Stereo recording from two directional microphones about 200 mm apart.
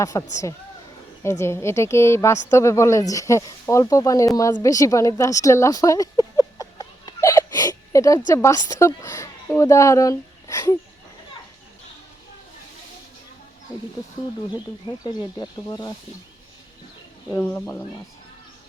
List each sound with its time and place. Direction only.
0.0 s a woman's voice: 15° left (ahead or behind)
4.4 s a sound: 15° left (ahead or behind)
8.3 s a woman's voice: 15° left (ahead or behind)
15.0 s speech: 20° left (ahead or behind)
17.3 s a woman's voice: 10° left (ahead or behind)